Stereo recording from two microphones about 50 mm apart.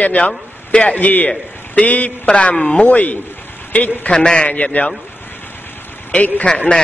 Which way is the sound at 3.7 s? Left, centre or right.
Left.